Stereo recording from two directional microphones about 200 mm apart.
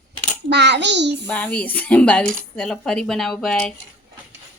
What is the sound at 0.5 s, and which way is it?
Speech, 60° right (ahead or behind).